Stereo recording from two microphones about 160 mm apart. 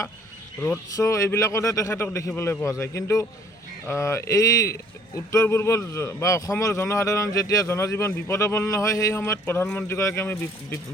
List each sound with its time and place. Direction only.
0.6 s a man's voice: 20° left (ahead or behind)